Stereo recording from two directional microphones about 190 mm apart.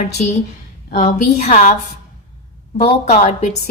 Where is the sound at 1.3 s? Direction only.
35° left (ahead or behind).